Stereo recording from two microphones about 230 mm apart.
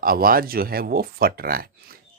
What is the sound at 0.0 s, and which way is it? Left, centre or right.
Speech, right.